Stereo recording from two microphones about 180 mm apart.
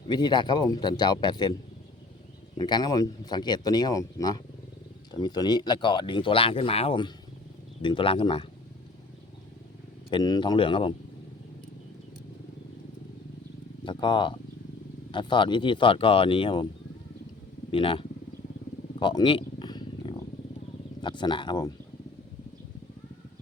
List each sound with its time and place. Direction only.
0.1 s speech: 25° left (ahead or behind)
2.6 s speech: 25° left (ahead or behind)
10.1 s speech: 25° left (ahead or behind)
13.8 s speech: 25° left (ahead or behind)
17.7 s speech: 30° left (ahead or behind)
18.9 s a sound: 25° left (ahead or behind)
21.0 s speech: 25° left (ahead or behind)